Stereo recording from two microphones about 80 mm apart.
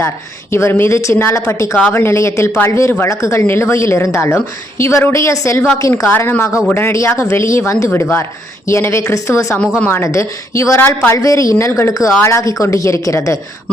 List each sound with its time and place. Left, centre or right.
0.5 s speech: left
6.1 s speech: left
9.6 s speech: left
10.1 s speech: left